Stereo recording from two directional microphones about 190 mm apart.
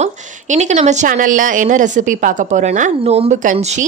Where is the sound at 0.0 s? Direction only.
40° right (ahead or behind).